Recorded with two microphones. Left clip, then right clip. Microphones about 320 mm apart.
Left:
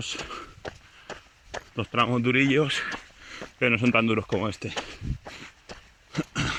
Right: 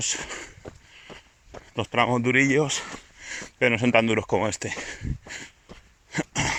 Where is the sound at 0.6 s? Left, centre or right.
Left.